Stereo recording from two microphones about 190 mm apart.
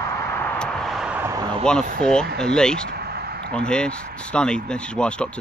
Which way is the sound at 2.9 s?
60° right (ahead or behind).